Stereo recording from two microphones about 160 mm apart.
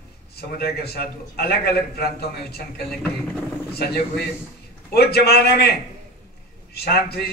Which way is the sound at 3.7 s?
80° left.